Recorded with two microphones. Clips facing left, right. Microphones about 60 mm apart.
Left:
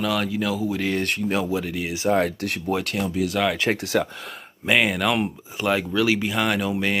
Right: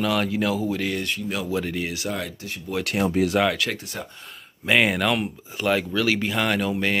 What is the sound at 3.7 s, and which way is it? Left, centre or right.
Speech, left.